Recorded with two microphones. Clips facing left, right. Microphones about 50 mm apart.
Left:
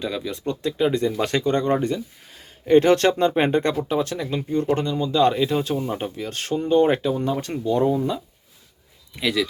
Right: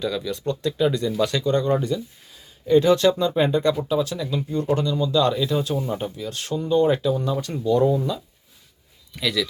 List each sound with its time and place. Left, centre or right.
0.0 s speech: left
1.2 s speech: left